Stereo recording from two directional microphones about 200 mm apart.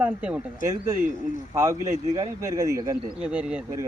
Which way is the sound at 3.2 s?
5° right (ahead or behind).